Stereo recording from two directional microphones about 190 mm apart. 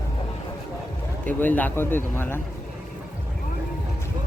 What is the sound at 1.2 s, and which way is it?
A man's voice, 10° left (ahead or behind).